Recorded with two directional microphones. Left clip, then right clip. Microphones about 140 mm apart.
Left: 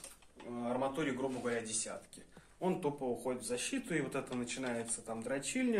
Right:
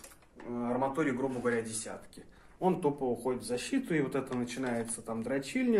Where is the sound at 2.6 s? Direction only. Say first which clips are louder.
Right 6 dB; 30° right (ahead or behind).